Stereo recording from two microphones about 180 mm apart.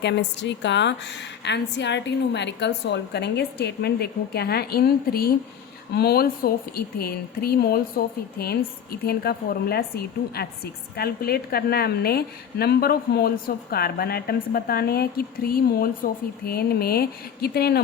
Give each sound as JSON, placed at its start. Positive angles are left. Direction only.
{"t": 0.0, "sound": "a woman's voice", "side_deg": 75}